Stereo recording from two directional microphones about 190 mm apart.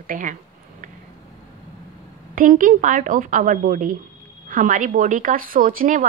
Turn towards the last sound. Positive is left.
turn(degrees=-45)  # may be behind; listen again after turning